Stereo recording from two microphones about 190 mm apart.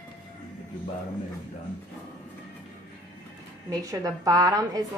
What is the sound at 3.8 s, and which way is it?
A woman's voice, 15° right (ahead or behind).